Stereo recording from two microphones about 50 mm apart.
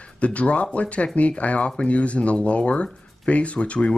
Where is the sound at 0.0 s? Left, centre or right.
Left.